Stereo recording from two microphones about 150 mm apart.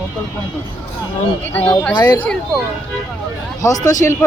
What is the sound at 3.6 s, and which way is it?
Speech, 20° left (ahead or behind).